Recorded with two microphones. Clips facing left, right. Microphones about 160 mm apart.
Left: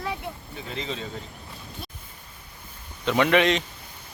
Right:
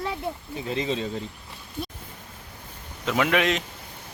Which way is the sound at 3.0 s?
Centre (ahead or behind).